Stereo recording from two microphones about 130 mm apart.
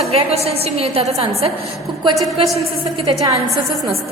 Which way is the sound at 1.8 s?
Centre (ahead or behind).